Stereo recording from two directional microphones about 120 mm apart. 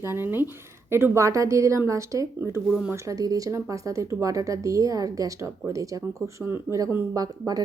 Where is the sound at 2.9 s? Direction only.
30° right (ahead or behind).